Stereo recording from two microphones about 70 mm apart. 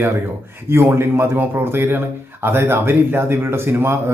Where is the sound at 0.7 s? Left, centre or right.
Right.